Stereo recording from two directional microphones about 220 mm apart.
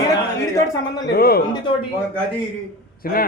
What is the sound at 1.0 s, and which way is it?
Speech, 45° left (ahead or behind).